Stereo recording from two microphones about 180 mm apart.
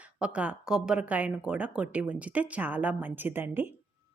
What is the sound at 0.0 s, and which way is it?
A woman's voice, 5° right (ahead or behind).